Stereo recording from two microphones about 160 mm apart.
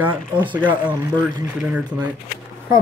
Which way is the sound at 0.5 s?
10° right (ahead or behind).